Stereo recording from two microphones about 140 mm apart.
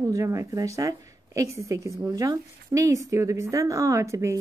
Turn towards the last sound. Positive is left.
turn(degrees=-20)  # may be behind; listen again after turning